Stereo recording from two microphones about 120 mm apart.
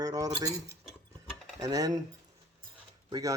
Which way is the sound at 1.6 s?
30° right (ahead or behind).